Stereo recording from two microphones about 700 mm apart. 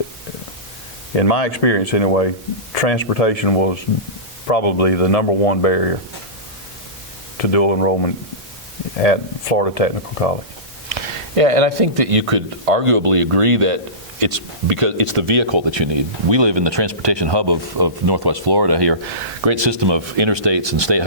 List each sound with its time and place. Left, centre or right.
1.1 s speech: left
7.3 s speech: left
10.8 s speech: right